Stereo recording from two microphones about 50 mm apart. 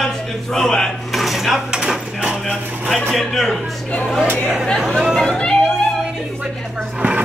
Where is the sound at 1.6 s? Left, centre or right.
Centre.